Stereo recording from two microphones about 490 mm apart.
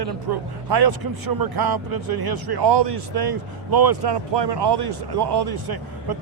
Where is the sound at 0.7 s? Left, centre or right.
Right.